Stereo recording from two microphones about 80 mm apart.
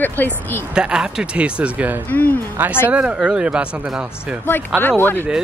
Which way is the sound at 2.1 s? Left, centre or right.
Left.